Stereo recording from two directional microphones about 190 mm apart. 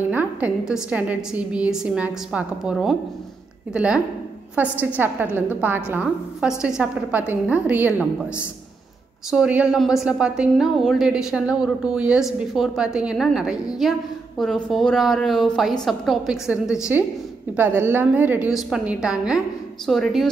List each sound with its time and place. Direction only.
0.1 s a woman's voice: 5° right (ahead or behind)